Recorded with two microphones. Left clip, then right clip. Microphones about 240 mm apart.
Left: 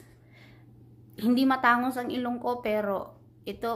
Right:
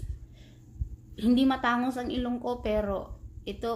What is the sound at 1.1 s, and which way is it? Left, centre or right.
A woman's voice, centre.